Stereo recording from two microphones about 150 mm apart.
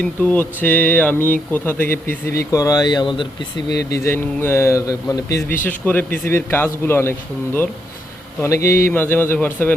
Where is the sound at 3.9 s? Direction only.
15° left (ahead or behind).